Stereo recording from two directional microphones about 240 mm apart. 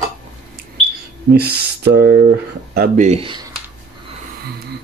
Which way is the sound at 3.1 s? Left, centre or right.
Right.